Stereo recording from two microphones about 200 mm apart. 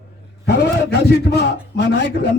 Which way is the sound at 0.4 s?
55° left (ahead or behind).